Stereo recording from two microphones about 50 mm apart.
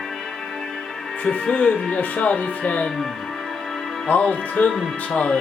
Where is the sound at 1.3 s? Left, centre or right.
Left.